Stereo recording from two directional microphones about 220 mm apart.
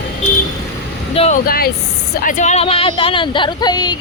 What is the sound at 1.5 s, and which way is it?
Speech, 45° left (ahead or behind).